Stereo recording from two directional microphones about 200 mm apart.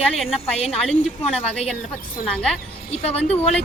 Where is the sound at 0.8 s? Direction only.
Centre (ahead or behind).